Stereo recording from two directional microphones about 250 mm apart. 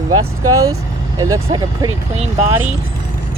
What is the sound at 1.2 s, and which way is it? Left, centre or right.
Speech, centre.